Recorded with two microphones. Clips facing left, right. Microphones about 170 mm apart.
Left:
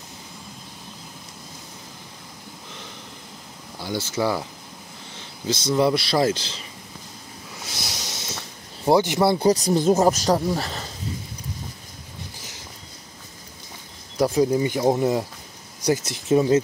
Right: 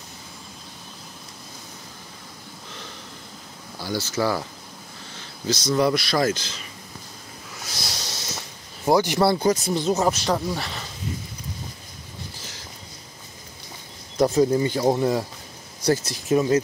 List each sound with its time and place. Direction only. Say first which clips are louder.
3.8 s speech: even; 20° left (ahead or behind)
7.6 s hiss: even; 20° left (ahead or behind)
8.8 s speech: left 1 dB; 25° left (ahead or behind)
9.5 s speech: left 3 dB; 35° left (ahead or behind)
12.4 s a sound: right 1 dB; 20° left (ahead or behind)
14.1 s speech: right 1 dB; 10° left (ahead or behind); by 16.6 s 25° left (ahead or behind)